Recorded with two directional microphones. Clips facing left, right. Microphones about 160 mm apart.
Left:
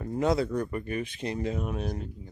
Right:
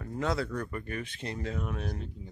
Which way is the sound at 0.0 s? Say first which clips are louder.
Left 5 dB; 20° left (ahead or behind).